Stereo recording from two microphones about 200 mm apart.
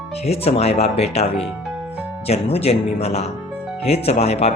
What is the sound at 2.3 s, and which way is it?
Speech, 30° left (ahead or behind).